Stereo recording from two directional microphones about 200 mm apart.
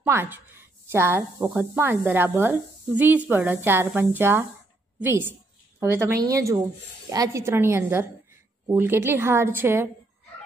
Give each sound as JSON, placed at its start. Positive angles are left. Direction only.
{"t": 0.0, "sound": "a woman's voice", "side_deg": -10}